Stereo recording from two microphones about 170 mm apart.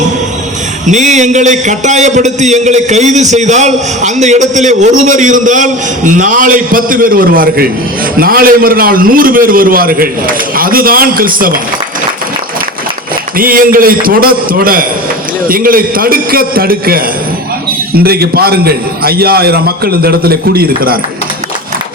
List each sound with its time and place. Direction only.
0.9 s a man's voice: 45° right (ahead or behind)
13.3 s a man's voice: 55° right (ahead or behind)